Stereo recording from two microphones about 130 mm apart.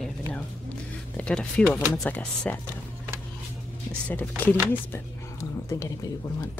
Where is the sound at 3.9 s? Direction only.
10° left (ahead or behind).